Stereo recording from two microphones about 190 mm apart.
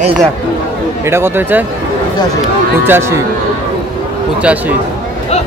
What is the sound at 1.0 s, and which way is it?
Speech, 10° right (ahead or behind).